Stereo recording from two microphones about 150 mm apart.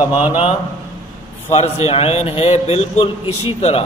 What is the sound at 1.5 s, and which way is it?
A man's voice, 45° left (ahead or behind).